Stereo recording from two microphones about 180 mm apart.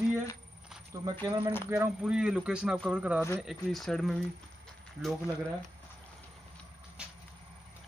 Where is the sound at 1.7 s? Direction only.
5° right (ahead or behind).